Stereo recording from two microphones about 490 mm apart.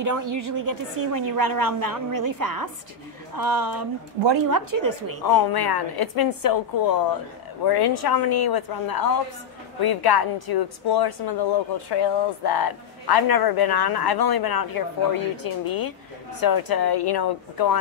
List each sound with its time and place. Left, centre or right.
0.0 s a woman's voice: right
5.2 s speech: left